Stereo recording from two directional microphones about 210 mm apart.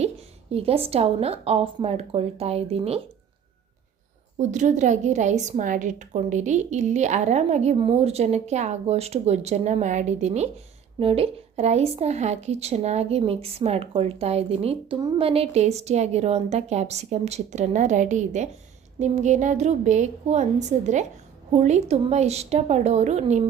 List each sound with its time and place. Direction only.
0.5 s a woman's voice: 30° right (ahead or behind)
4.4 s a woman's voice: 35° right (ahead or behind)